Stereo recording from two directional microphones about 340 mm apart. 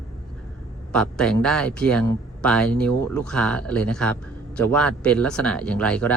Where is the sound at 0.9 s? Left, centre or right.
Centre.